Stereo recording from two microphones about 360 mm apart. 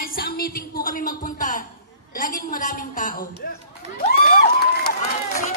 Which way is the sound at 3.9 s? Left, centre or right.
Left.